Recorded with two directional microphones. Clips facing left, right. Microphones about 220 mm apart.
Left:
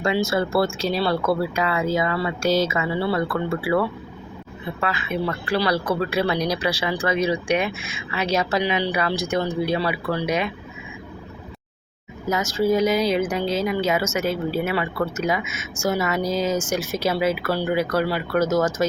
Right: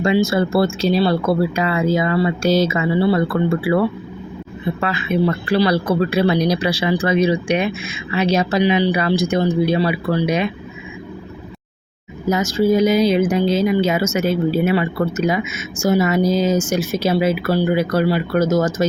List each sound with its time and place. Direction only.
0.0 s speech: 20° right (ahead or behind)
12.3 s speech: 25° right (ahead or behind)